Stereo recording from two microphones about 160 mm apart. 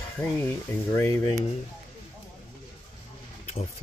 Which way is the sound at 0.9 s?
15° left (ahead or behind).